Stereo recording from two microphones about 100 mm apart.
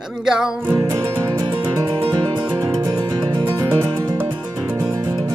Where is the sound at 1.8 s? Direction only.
45° right (ahead or behind).